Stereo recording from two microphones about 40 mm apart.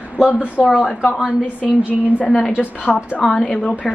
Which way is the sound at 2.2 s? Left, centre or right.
Left.